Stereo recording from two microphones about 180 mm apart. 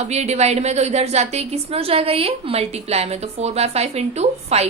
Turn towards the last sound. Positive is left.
turn(degrees=-35)  # may be behind; listen again after turning